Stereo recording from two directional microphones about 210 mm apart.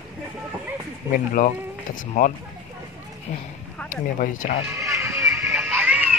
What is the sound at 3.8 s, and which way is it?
Speech, 40° left (ahead or behind).